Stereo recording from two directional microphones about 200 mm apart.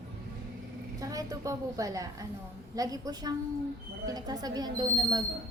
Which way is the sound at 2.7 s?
20° right (ahead or behind).